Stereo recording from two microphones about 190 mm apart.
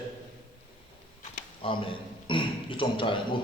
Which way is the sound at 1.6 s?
30° left (ahead or behind).